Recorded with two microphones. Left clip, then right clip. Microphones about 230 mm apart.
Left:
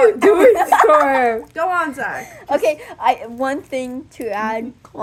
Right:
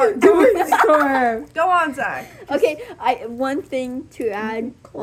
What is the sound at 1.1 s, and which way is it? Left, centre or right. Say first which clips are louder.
Speech: left 2 dB; left.